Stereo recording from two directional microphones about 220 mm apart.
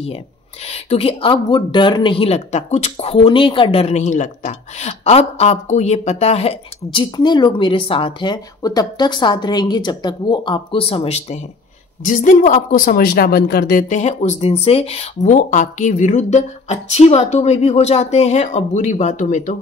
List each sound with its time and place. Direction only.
0.7 s speech: 30° left (ahead or behind)